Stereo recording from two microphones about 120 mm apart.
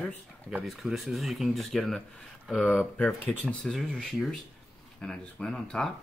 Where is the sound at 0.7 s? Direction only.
5° right (ahead or behind).